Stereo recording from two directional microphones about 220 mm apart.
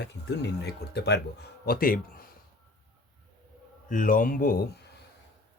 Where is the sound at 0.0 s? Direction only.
50° left (ahead or behind).